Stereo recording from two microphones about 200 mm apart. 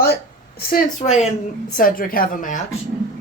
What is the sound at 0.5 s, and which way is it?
A woman's voice, 40° left (ahead or behind).